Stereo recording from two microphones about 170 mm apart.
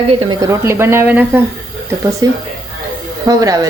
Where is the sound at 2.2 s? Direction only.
20° right (ahead or behind).